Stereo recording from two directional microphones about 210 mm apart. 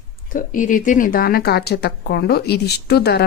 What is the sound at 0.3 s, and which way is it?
Speech, 40° left (ahead or behind).